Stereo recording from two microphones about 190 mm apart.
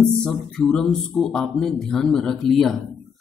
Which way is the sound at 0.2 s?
5° left (ahead or behind).